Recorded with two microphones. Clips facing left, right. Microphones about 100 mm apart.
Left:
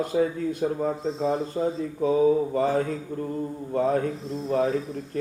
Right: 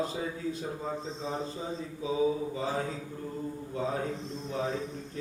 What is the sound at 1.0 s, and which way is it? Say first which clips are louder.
Speech: left 11 dB; 5° left (ahead or behind).